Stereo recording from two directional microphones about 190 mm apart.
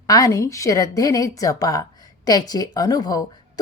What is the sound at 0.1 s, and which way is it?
A woman's voice, 20° left (ahead or behind).